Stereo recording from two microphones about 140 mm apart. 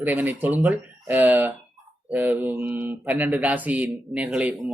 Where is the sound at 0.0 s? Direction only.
10° right (ahead or behind).